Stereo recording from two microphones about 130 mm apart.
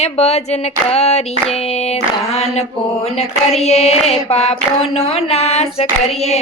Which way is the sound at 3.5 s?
55° left (ahead or behind).